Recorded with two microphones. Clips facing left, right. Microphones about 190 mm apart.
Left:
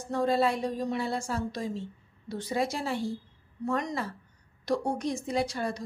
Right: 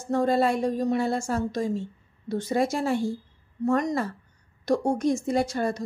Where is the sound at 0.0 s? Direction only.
45° right (ahead or behind).